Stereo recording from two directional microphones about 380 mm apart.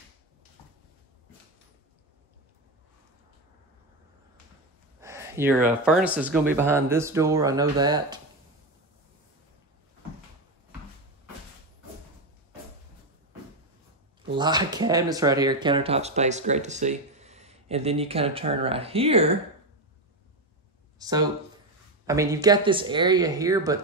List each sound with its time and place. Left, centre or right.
5.0 s speech: centre
14.3 s speech: centre
21.0 s speech: centre